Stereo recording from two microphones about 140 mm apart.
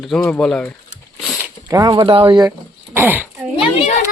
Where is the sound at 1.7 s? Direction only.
25° right (ahead or behind).